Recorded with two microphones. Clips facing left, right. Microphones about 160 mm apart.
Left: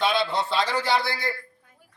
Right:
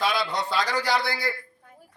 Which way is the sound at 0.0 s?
25° left (ahead or behind).